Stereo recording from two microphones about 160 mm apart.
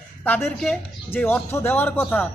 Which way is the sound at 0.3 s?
10° left (ahead or behind).